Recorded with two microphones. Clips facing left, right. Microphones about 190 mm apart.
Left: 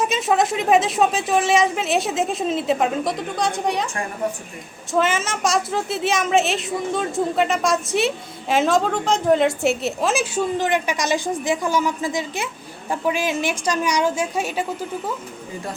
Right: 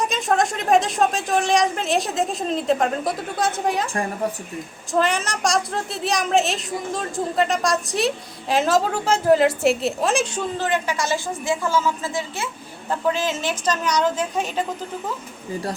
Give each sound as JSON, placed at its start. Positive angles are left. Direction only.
{"t": 0.0, "sound": "a woman's voice", "side_deg": 5}
{"t": 4.9, "sound": "a woman's voice", "side_deg": 0}
{"t": 10.6, "sound": "a woman's voice", "side_deg": 15}